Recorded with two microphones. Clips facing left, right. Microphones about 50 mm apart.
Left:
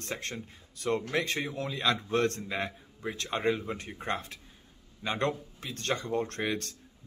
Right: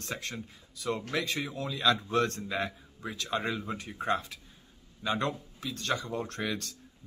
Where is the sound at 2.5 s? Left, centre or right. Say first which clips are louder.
Right 1 dB; centre; by 5.9 s left.